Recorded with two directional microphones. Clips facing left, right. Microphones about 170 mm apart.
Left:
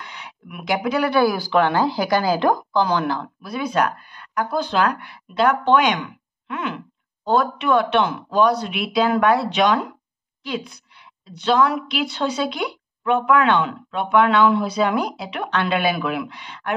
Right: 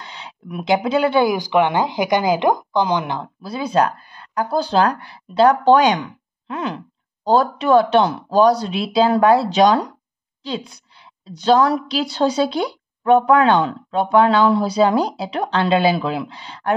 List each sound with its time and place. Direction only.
0.0 s speech: 30° right (ahead or behind)
6.4 s a sound: 35° right (ahead or behind)
7.2 s a woman's voice: 35° right (ahead or behind)